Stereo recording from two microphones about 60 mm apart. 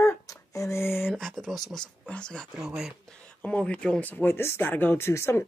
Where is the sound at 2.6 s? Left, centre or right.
Centre.